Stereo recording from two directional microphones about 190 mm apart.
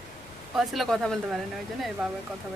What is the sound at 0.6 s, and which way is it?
Speech, centre (ahead or behind).